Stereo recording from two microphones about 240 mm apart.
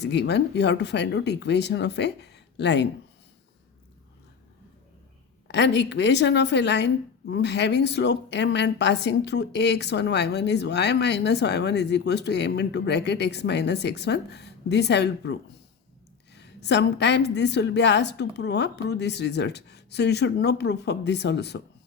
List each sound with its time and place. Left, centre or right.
0.0 s a woman's voice: left
5.5 s a woman's voice: left